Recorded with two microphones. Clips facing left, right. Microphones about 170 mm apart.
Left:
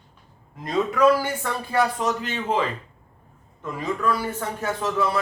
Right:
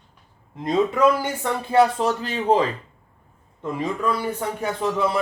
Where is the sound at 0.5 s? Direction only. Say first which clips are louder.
Right 2 dB; 25° right (ahead or behind).